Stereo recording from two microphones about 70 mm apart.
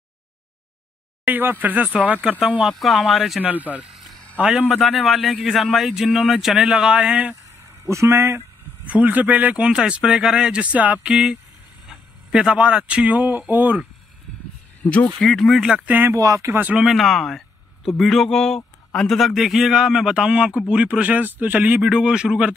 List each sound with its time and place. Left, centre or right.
1.2 s speech: right
2.6 s a man's voice: centre
3.3 s a man's voice: right
4.7 s a man's voice: centre
7.6 s speech: right
8.8 s speech: right
11.1 s a man's voice: centre; by 13.7 s right
14.8 s speech: left
15.1 s speech: centre
15.6 s speech: centre
16.2 s speech: right
16.7 s a man's voice: centre